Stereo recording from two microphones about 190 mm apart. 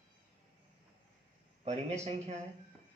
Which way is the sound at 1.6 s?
35° right (ahead or behind).